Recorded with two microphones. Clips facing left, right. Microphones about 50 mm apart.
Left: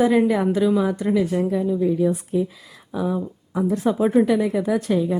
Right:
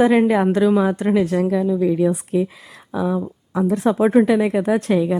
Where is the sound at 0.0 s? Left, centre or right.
Right.